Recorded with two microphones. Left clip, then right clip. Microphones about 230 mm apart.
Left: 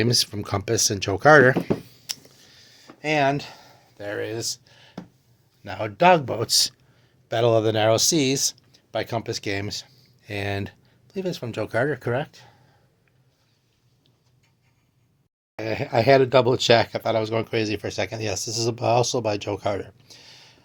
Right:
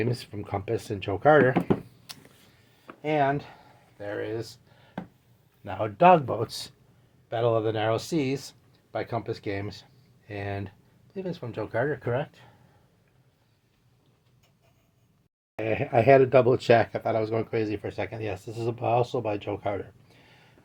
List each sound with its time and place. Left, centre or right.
0.0 s speech: left
2.1 s a sound: left
5.6 s speech: centre
6.5 s speech: left
7.3 s speech: left
15.5 s speech: centre; by 20.6 s left